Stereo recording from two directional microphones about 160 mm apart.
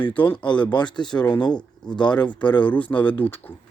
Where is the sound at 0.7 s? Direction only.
30° left (ahead or behind).